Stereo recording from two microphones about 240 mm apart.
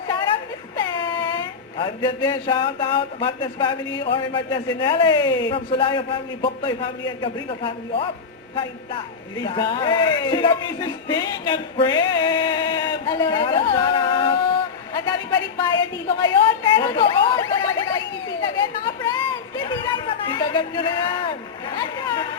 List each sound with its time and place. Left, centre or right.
0.8 s speech: centre
9.4 s speech: centre
19.1 s a sound: centre
21.8 s speech: centre